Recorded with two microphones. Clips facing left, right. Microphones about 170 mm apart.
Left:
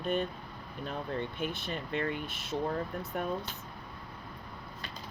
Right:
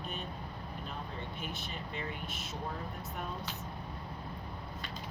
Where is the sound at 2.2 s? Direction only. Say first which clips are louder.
Even; 50° right (ahead or behind).